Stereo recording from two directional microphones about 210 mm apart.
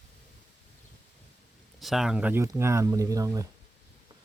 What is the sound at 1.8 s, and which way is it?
Speech, centre (ahead or behind).